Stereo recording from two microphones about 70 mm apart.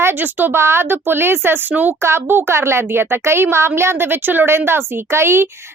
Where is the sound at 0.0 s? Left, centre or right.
Right.